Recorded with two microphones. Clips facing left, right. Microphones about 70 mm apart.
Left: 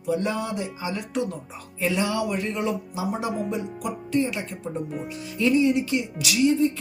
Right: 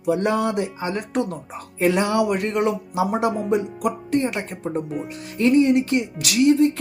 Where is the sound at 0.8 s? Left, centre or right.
Right.